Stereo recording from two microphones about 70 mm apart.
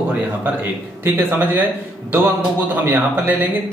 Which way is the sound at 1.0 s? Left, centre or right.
Right.